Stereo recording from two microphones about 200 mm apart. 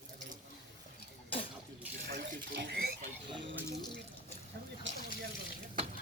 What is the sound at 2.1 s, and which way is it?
Water, 55° right (ahead or behind).